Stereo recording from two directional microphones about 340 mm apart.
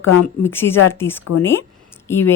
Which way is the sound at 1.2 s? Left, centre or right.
Left.